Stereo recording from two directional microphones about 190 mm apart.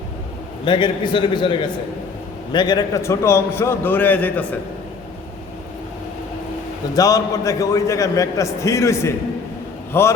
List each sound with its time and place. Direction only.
0.6 s a man's voice: 25° left (ahead or behind)
6.9 s a man's voice: 20° left (ahead or behind)